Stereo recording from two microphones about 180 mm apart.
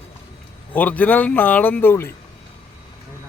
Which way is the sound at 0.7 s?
10° left (ahead or behind).